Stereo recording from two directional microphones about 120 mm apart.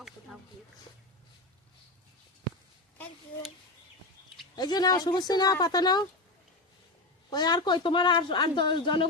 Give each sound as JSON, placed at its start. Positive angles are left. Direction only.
{"t": 4.5, "sound": "speech", "side_deg": 35}
{"t": 7.3, "sound": "speech", "side_deg": 35}